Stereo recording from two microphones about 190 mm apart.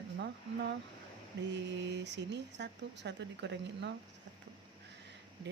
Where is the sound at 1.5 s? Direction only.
70° right (ahead or behind).